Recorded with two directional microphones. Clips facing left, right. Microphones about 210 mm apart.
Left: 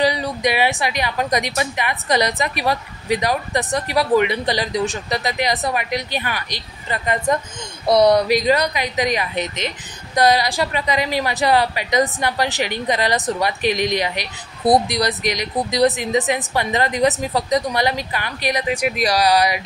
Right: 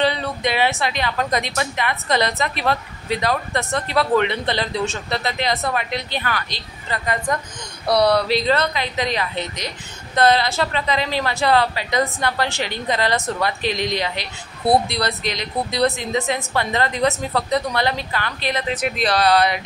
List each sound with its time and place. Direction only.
0.0 s a woman's voice: 15° left (ahead or behind)